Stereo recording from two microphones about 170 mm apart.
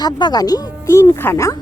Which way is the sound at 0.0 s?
25° left (ahead or behind).